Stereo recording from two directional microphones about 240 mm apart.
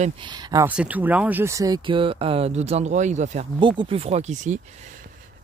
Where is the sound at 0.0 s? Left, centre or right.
Centre.